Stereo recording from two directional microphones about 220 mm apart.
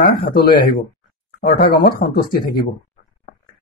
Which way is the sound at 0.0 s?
40° left (ahead or behind).